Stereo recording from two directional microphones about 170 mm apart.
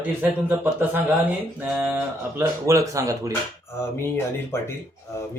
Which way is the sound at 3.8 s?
15° left (ahead or behind).